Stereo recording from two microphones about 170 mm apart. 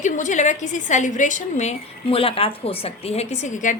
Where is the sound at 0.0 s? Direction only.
45° left (ahead or behind).